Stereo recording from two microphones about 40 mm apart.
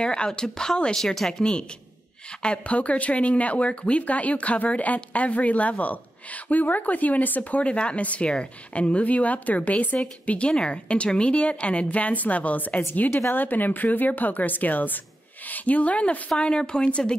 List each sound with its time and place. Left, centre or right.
0.0 s a woman's voice: left
0.9 s speech: centre
2.4 s speech: left
7.6 s a woman's voice: left
13.1 s speech: left
16.3 s a woman's voice: left